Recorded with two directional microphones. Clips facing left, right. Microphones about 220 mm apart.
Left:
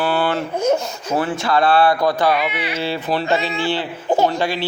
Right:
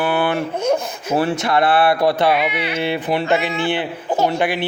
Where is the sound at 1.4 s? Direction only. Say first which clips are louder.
Left 4 dB; 20° right (ahead or behind).